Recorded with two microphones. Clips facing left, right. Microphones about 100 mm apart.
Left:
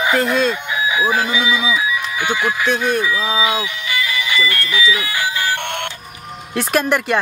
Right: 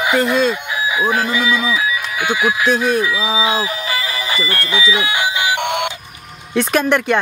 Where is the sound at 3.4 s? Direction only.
35° right (ahead or behind); by 5.9 s 15° right (ahead or behind).